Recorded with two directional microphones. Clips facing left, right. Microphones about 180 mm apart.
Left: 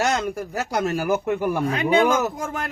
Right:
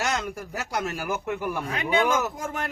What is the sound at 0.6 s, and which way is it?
Speech, 35° left (ahead or behind).